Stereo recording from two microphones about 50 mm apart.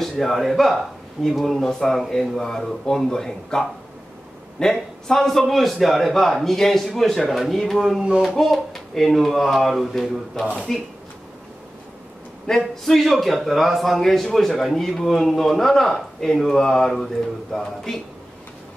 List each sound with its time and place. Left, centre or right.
0.0 s a man's voice: centre
12.4 s a man's voice: centre